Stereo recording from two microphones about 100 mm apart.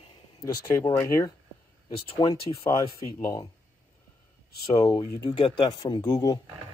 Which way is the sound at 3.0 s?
35° left (ahead or behind).